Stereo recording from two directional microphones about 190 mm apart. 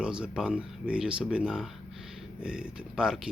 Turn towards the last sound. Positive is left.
turn(degrees=-5)  # may be behind; listen again after turning